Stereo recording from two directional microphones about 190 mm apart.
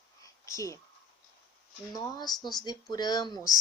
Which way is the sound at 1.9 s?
20° left (ahead or behind).